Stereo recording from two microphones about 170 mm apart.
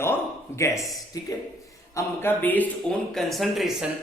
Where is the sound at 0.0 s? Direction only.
15° left (ahead or behind).